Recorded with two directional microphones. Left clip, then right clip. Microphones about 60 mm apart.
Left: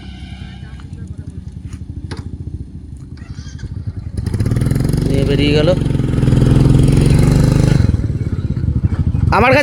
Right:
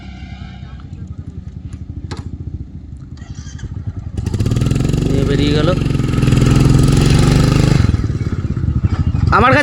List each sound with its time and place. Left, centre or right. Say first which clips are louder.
4.1 s motorcycle: right 1 dB; left
4.9 s vehicle: even; left
5.1 s speech: left 2 dB; left
5.9 s vehicle: even; centre
8.8 s vehicle: even; right